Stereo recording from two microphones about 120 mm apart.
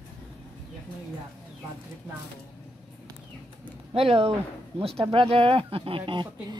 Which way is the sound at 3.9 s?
50° right (ahead or behind).